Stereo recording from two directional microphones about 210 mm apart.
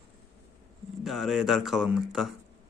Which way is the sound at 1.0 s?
Centre (ahead or behind).